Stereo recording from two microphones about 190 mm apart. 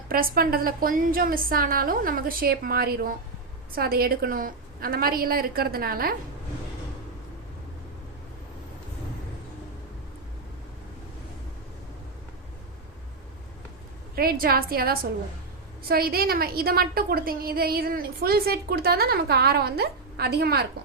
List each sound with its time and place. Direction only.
0.1 s a woman's voice: 50° right (ahead or behind)
14.2 s a woman's voice: 50° right (ahead or behind)